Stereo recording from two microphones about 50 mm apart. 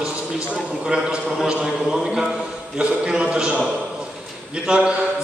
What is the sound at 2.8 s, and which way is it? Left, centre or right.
Speech, centre.